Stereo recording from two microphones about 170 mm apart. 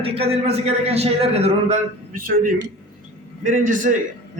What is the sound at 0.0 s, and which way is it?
A man's voice, 35° right (ahead or behind).